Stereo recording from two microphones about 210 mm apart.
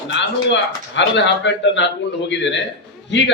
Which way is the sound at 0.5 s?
60° left (ahead or behind).